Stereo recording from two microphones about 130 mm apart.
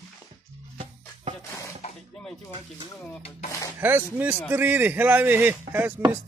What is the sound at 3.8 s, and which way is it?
Speech, 15° right (ahead or behind).